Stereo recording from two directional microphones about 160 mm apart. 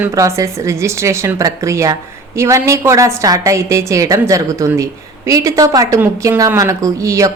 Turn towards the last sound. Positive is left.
turn(degrees=-20)  # may be behind; listen again after turning